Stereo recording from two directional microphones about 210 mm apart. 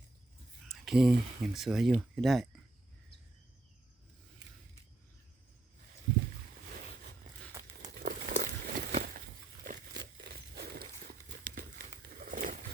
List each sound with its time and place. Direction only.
0.7 s speech: centre (ahead or behind)
7.9 s crumpling: 40° right (ahead or behind)
8.9 s a sound: 30° right (ahead or behind)
9.9 s walk: 50° right (ahead or behind)